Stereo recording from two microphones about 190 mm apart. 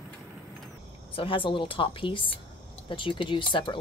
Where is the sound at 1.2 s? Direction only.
30° left (ahead or behind).